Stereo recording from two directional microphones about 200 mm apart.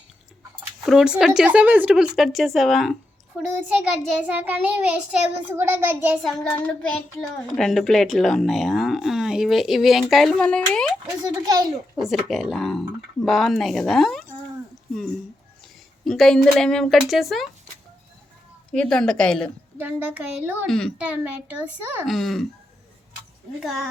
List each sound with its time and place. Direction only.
0.9 s a child's voice: 5° right (ahead or behind)
6.2 s speech: 5° left (ahead or behind)
11.0 s a child's voice: 20° right (ahead or behind)
11.9 s speech: centre (ahead or behind)
16.0 s speech: centre (ahead or behind)
18.7 s speech: 5° left (ahead or behind)
19.8 s a child's voice: 10° right (ahead or behind)
20.7 s speech: centre (ahead or behind)
23.6 s speech: centre (ahead or behind)